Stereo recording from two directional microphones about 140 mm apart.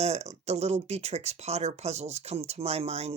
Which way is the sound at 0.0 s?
50° right (ahead or behind).